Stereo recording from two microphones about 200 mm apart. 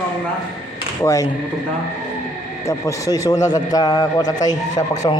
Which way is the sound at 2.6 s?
15° left (ahead or behind).